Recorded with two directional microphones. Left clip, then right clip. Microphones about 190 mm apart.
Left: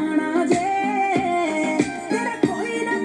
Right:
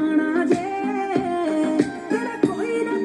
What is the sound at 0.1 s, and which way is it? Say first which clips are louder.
Music: even; 30° left (ahead or behind).